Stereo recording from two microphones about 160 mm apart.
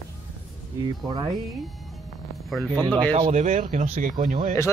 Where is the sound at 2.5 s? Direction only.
5° left (ahead or behind).